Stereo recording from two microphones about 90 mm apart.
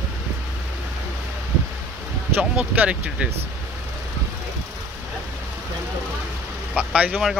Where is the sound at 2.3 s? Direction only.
15° right (ahead or behind).